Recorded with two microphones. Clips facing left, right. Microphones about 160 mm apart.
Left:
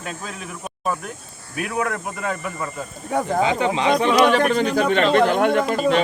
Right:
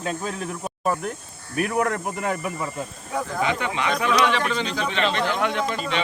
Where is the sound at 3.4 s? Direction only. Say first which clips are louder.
Left 3 dB; 25° left (ahead or behind).